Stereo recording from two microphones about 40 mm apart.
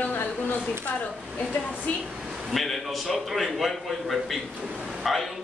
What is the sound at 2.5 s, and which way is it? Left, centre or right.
A man's voice, centre.